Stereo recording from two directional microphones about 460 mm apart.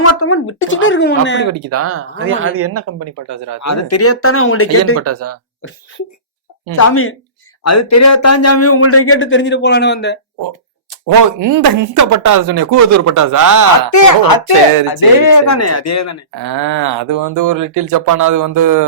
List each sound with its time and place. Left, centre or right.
0.0 s a man's voice: left
1.5 s speech: right
3.6 s a man's voice: left
4.9 s speech: right
6.7 s a man's voice: left
11.0 s speech: right
13.9 s speech: left
16.3 s speech: right